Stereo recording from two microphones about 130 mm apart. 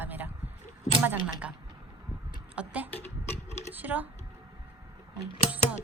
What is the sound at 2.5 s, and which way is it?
Speech, 10° right (ahead or behind).